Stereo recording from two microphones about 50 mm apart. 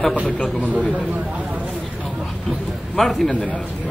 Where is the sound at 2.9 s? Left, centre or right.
Centre.